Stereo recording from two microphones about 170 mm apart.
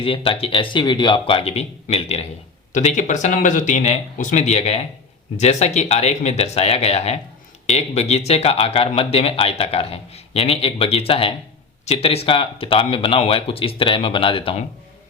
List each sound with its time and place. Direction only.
0.0 s speech: 30° left (ahead or behind)